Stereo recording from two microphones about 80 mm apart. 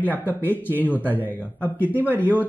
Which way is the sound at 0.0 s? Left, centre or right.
Left.